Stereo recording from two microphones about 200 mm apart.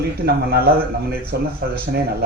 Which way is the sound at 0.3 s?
50° right (ahead or behind).